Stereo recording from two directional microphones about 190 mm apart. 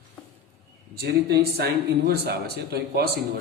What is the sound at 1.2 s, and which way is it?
Speech, 55° right (ahead or behind).